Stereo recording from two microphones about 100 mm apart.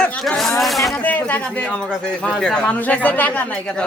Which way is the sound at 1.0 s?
15° left (ahead or behind).